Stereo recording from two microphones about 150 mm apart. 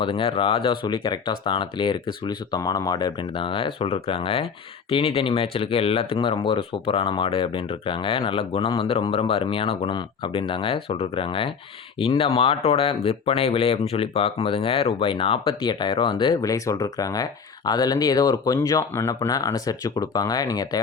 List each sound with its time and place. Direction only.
0.0 s speech: 35° left (ahead or behind)
16.4 s speech: 20° left (ahead or behind)